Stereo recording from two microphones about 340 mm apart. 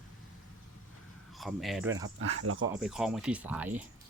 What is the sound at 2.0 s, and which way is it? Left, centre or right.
Speech, right.